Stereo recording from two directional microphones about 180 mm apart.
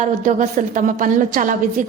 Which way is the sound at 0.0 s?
45° right (ahead or behind).